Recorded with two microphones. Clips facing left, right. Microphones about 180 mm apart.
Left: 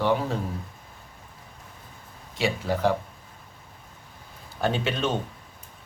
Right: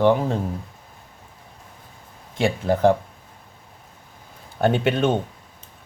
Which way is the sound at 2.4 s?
50° right (ahead or behind).